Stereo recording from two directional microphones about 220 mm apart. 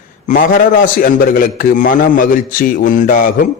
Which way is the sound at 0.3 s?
35° left (ahead or behind).